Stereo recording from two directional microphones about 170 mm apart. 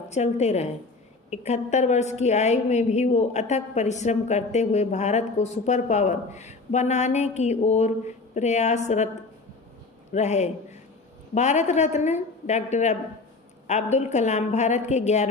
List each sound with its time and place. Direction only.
0.1 s a woman's voice: 40° left (ahead or behind)
10.1 s a woman's voice: 40° left (ahead or behind)